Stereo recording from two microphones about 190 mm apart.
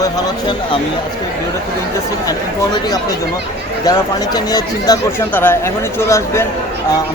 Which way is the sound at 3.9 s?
20° left (ahead or behind).